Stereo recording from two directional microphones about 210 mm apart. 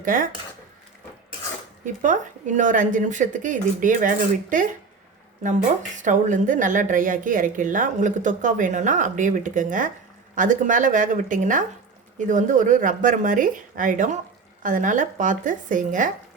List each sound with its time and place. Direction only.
0.0 s speech: 40° right (ahead or behind)
1.8 s a woman's voice: 35° right (ahead or behind)
6.0 s a woman's voice: 35° right (ahead or behind)